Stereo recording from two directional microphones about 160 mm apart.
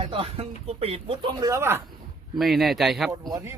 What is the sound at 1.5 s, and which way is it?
Speech, 15° right (ahead or behind).